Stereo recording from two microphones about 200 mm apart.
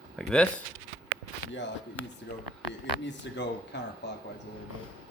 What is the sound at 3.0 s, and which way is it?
Speech, 60° left (ahead or behind).